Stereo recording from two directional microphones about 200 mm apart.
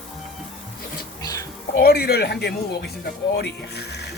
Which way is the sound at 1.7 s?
50° left (ahead or behind).